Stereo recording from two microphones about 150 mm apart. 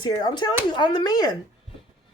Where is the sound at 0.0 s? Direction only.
25° left (ahead or behind).